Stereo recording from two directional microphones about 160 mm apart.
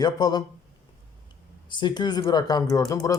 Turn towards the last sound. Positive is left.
turn(degrees=20)  # may be behind; listen again after turning